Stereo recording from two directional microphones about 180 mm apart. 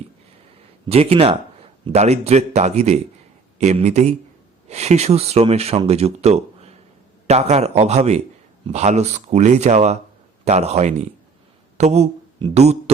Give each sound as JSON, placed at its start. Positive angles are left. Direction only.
{"t": 0.9, "sound": "speech", "side_deg": -35}